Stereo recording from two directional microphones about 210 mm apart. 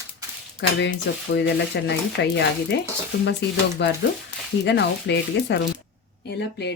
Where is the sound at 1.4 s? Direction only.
55° left (ahead or behind).